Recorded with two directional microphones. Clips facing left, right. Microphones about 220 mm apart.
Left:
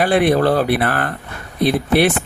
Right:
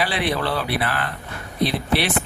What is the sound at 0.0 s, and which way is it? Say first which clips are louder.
Speech: left 9 dB; 50° left (ahead or behind).